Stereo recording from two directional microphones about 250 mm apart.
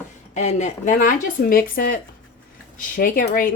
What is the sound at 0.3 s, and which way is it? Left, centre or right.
Speech, left.